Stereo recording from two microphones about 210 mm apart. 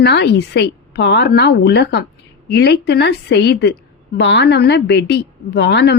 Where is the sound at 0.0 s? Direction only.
55° left (ahead or behind).